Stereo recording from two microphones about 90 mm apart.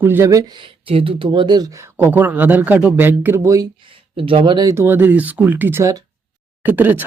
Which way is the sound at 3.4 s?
35° right (ahead or behind).